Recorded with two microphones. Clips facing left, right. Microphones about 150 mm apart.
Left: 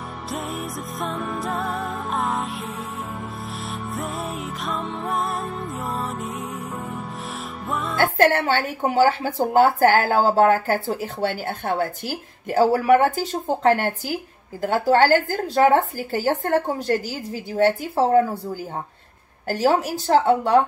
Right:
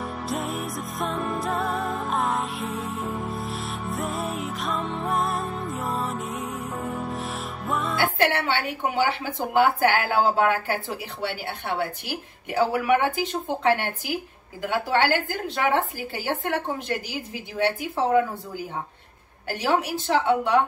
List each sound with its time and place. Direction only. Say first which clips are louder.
0.3 s music: left 1 dB; centre (ahead or behind)
8.0 s speech: left 7 dB; 45° left (ahead or behind)